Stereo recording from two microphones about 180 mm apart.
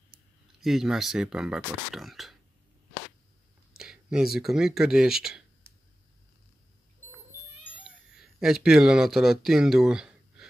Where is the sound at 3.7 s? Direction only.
5° right (ahead or behind).